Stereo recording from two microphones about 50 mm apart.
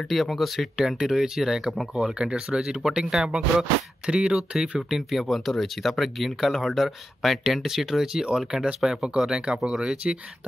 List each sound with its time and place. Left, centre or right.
0.1 s speech: centre